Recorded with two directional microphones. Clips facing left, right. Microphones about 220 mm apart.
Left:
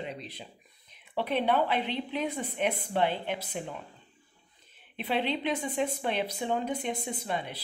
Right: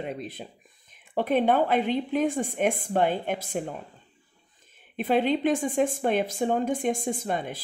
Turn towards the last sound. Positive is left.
turn(degrees=-45)  # may be behind; listen again after turning